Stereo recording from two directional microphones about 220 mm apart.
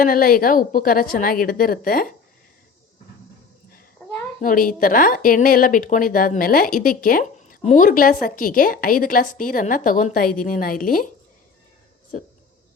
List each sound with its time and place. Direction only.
0.0 s speech: 40° left (ahead or behind)
4.4 s speech: 40° left (ahead or behind)